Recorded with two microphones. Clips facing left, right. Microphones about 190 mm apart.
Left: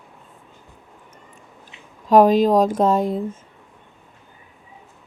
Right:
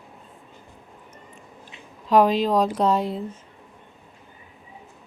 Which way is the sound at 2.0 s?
45° left (ahead or behind).